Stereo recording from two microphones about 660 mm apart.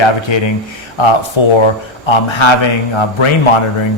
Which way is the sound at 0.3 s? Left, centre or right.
Left.